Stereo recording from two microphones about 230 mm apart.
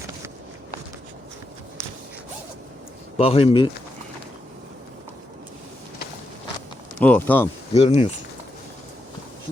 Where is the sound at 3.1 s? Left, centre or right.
Left.